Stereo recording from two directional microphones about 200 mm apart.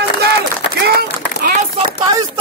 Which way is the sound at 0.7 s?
50° right (ahead or behind).